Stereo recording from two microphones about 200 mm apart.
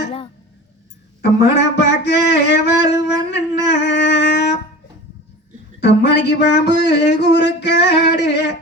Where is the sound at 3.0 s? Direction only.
60° left (ahead or behind).